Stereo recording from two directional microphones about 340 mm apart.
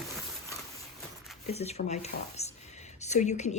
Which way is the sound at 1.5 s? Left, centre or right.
Centre.